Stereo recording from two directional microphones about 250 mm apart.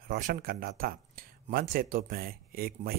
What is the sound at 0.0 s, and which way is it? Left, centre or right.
Speech, right.